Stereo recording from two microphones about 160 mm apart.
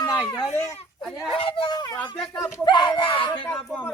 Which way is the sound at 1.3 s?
35° left (ahead or behind).